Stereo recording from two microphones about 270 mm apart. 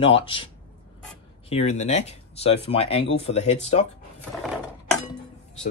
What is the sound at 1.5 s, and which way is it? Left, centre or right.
Speech, left.